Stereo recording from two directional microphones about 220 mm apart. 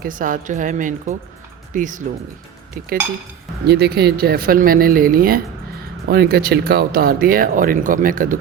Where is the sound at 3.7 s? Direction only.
45° right (ahead or behind).